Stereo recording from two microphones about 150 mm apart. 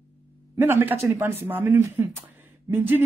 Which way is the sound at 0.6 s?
15° right (ahead or behind).